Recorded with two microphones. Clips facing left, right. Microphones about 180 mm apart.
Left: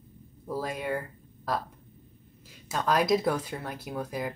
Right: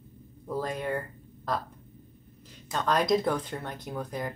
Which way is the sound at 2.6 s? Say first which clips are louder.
Left 1 dB; 5° left (ahead or behind).